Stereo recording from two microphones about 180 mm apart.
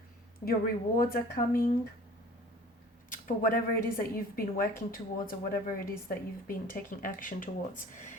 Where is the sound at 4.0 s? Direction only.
50° left (ahead or behind).